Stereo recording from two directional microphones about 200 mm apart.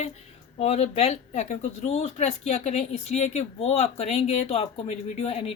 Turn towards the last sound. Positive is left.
turn(degrees=30)  # may be behind; listen again after turning